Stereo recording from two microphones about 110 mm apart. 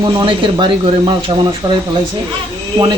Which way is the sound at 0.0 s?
40° right (ahead or behind).